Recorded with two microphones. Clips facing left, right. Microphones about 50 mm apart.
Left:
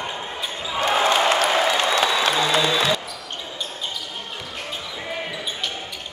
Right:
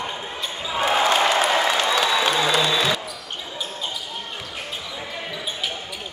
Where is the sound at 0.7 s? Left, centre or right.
Centre.